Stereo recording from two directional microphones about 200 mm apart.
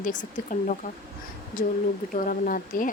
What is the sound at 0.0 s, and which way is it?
Speech, 40° left (ahead or behind).